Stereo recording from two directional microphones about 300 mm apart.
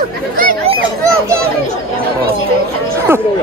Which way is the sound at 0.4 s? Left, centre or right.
Right.